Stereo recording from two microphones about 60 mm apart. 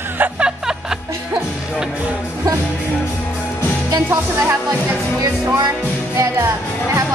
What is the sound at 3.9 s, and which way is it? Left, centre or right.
Music, right.